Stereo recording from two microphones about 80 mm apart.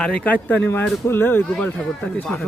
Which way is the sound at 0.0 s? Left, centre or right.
Centre.